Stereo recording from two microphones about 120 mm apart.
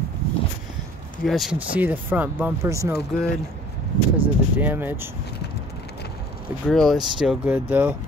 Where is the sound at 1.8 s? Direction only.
15° right (ahead or behind).